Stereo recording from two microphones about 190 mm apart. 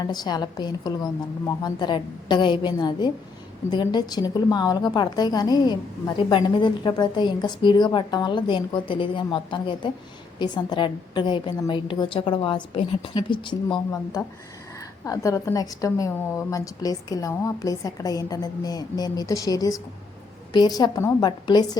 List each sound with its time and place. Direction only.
0.0 s a woman's voice: 20° left (ahead or behind)